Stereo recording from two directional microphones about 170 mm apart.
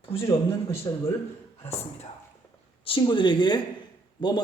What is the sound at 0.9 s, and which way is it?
Speech, 20° left (ahead or behind).